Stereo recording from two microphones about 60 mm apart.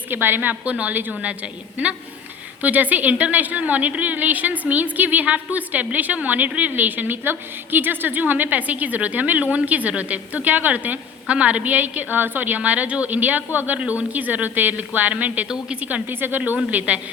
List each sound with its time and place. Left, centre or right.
0.1 s a woman's voice: right
0.6 s a woman's voice: right
15.4 s speech: centre
15.8 s a woman's voice: right